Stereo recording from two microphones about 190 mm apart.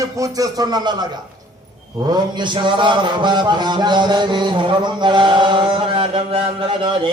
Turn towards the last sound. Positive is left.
turn(degrees=-25)  # may be behind; listen again after turning